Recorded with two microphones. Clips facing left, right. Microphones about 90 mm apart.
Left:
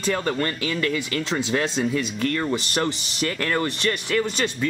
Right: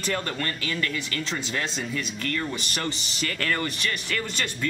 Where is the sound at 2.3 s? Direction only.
25° left (ahead or behind).